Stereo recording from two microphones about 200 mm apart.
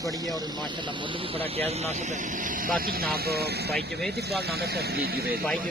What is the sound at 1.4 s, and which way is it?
Speech, 30° right (ahead or behind).